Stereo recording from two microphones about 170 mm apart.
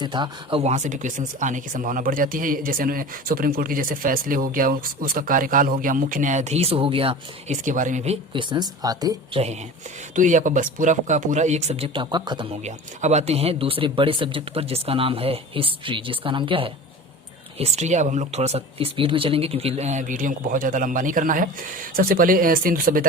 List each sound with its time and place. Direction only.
0.0 s speech: 25° right (ahead or behind)
0.6 s speech: 45° right (ahead or behind); by 9.4 s 20° right (ahead or behind)
10.2 s speech: 50° right (ahead or behind); by 12.5 s 25° right (ahead or behind)
12.6 s speech: 40° right (ahead or behind); by 23.0 s 60° right (ahead or behind)